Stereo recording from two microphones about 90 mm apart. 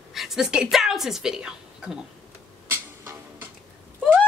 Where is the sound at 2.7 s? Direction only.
25° right (ahead or behind).